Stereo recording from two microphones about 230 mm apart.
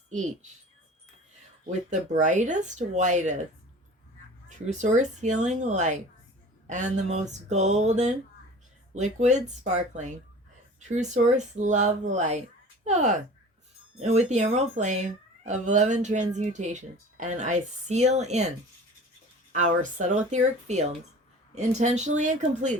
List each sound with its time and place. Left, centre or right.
1.6 s speech: right
4.4 s speech: right
19.5 s speech: right